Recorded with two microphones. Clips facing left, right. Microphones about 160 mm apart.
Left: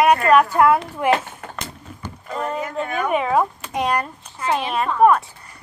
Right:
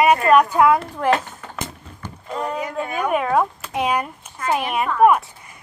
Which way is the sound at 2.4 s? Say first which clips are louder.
Even; 15° right (ahead or behind).